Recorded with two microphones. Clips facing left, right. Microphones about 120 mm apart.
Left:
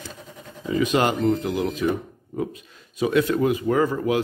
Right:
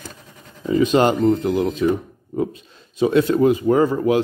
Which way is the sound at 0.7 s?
30° right (ahead or behind).